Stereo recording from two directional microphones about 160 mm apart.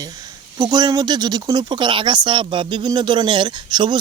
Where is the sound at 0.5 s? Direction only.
25° right (ahead or behind).